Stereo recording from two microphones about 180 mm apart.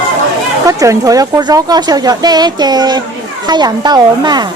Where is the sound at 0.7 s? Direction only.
20° right (ahead or behind).